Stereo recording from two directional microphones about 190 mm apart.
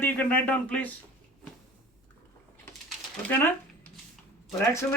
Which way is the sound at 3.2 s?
10° left (ahead or behind).